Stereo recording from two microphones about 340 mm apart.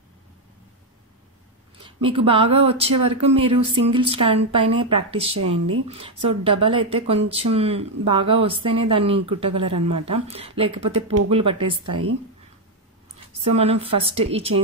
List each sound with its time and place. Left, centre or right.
2.0 s speech: centre
13.4 s speech: centre